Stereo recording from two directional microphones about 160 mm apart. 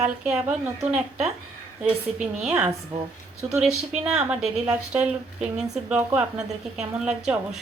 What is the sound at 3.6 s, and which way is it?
Speech, 45° right (ahead or behind).